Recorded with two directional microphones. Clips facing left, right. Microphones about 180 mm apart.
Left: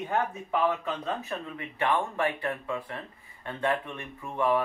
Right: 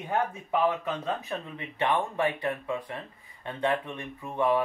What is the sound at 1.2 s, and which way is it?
Speech, 20° right (ahead or behind).